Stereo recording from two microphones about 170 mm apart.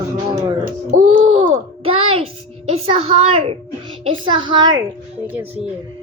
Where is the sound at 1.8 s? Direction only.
35° right (ahead or behind).